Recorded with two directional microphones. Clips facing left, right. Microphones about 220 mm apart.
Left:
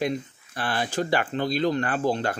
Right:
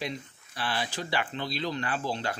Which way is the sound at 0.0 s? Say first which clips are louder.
Left 9 dB; 50° left (ahead or behind).